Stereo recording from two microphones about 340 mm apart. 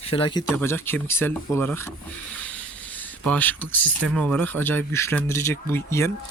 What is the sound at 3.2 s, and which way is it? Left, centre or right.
Speech, centre.